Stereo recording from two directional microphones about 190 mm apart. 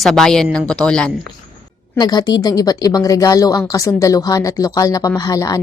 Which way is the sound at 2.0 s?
20° left (ahead or behind).